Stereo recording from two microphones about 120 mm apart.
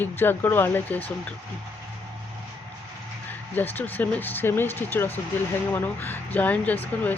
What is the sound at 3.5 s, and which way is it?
Speech, 15° left (ahead or behind).